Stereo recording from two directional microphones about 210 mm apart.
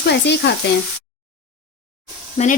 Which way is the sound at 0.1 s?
55° left (ahead or behind).